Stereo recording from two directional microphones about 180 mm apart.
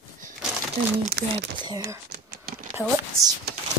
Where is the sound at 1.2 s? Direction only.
65° right (ahead or behind).